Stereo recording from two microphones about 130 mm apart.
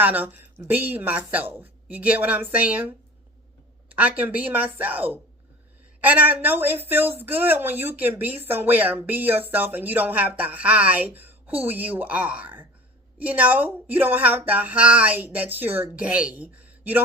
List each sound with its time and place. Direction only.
0.0 s a woman's voice: 15° right (ahead or behind)